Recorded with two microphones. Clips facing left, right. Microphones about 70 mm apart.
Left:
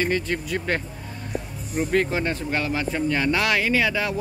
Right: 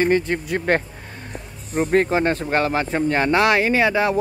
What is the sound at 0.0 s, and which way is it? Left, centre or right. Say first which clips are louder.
Speech: right 5 dB; right.